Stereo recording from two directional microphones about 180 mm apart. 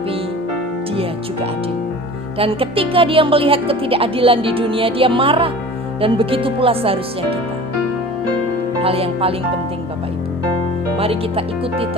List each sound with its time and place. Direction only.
2.4 s speech: 30° right (ahead or behind)
8.8 s speech: 30° right (ahead or behind)
10.9 s speech: 30° right (ahead or behind)